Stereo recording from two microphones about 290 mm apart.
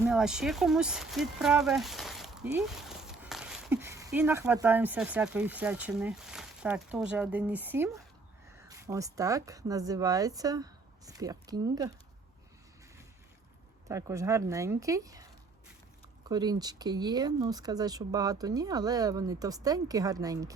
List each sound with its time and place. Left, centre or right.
0.0 s speech: centre
13.8 s speech: centre